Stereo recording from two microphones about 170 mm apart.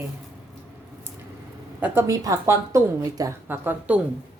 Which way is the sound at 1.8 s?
15° right (ahead or behind).